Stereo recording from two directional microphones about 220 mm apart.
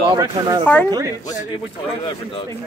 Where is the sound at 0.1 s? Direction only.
20° right (ahead or behind).